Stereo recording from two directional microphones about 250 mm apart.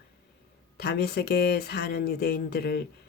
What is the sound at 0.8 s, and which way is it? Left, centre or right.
Speech, left.